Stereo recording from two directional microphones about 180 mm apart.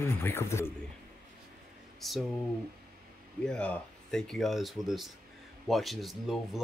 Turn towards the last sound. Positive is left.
turn(degrees=0)  # may be behind; listen again after turning